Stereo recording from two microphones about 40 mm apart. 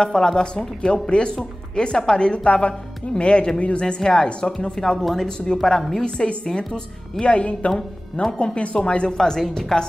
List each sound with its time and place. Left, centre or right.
0.0 s a woman's voice: centre
6.0 s a woman's voice: left
7.3 s a woman's voice: left
9.2 s speech: centre